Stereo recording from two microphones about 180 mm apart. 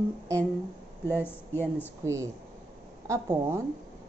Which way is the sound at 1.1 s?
10° left (ahead or behind).